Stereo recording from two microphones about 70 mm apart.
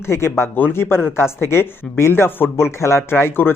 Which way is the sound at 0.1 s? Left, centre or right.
Left.